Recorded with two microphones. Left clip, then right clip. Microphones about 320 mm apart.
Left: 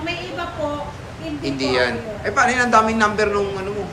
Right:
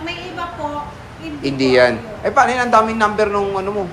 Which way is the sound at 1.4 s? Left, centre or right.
Right.